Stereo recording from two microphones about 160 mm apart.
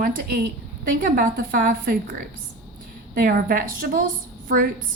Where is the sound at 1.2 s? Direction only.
60° right (ahead or behind).